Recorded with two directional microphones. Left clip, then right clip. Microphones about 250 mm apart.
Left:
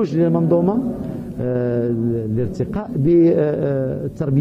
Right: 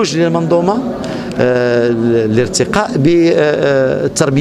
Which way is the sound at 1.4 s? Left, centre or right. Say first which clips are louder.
Right 10 dB; centre.